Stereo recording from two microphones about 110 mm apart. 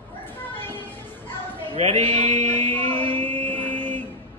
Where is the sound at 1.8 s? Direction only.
85° right.